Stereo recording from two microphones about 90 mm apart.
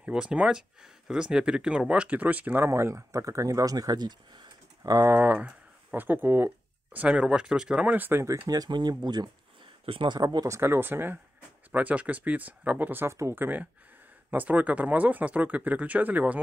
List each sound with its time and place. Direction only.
0.0 s speech: 10° right (ahead or behind); by 4.5 s 55° right (ahead or behind)
4.8 s speech: 35° right (ahead or behind)
5.1 s speech: 20° right (ahead or behind)
8.5 s speech: 50° right (ahead or behind)
9.8 s speech: 80° right
10.1 s speech: 45° right (ahead or behind); by 16.3 s 20° right (ahead or behind)